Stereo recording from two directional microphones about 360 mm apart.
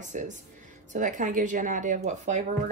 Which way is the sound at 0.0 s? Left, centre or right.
Centre.